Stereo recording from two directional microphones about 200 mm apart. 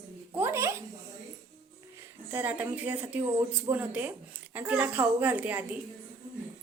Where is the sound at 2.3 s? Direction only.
10° right (ahead or behind).